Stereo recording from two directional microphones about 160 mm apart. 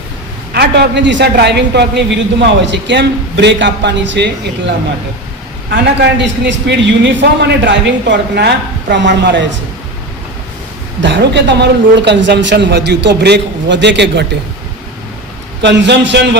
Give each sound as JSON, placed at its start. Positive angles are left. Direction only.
{"t": 0.5, "sound": "a man's voice", "side_deg": -90}
{"t": 5.7, "sound": "a man's voice", "side_deg": -90}
{"t": 11.0, "sound": "a man's voice", "side_deg": -90}
{"t": 15.6, "sound": "a man's voice", "side_deg": -90}